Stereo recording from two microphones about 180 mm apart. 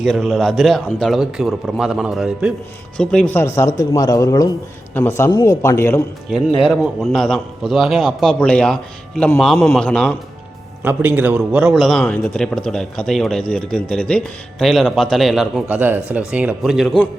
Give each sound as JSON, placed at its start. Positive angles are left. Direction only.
{"t": 0.0, "sound": "a man's voice", "side_deg": 0}
{"t": 6.7, "sound": "a man's voice", "side_deg": 0}
{"t": 10.8, "sound": "a man's voice", "side_deg": -10}